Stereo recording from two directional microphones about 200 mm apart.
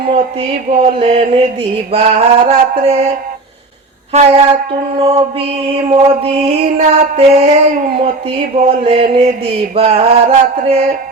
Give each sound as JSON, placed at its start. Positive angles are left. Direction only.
{"t": 0.0, "sound": "mantra", "side_deg": -35}
{"t": 4.9, "sound": "music", "side_deg": -30}
{"t": 5.7, "sound": "mantra", "side_deg": -30}
{"t": 7.9, "sound": "music", "side_deg": -25}
{"t": 9.7, "sound": "mantra", "side_deg": -30}